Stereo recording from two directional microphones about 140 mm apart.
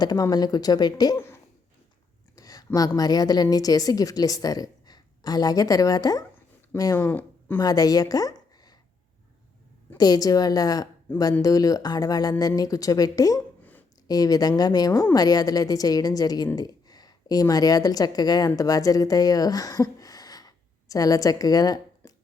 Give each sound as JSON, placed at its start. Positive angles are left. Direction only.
{"t": 0.0, "sound": "a woman's voice", "side_deg": 25}
{"t": 2.3, "sound": "a sound", "side_deg": 25}
{"t": 2.7, "sound": "a woman's voice", "side_deg": 25}
{"t": 7.0, "sound": "speech", "side_deg": 15}
{"t": 7.6, "sound": "a woman's voice", "side_deg": 25}
{"t": 10.0, "sound": "a woman's voice", "side_deg": 25}
{"t": 11.1, "sound": "speech", "side_deg": 15}
{"t": 11.4, "sound": "a woman's voice", "side_deg": 25}
{"t": 13.6, "sound": "a sound", "side_deg": 10}
{"t": 14.1, "sound": "a woman's voice", "side_deg": 25}